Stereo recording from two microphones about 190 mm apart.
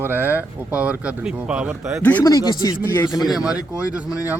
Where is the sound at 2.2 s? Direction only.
20° left (ahead or behind).